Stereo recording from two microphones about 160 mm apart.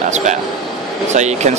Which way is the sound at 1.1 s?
45° right (ahead or behind).